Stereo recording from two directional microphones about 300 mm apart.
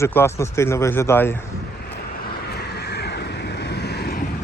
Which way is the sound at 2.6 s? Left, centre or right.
Left.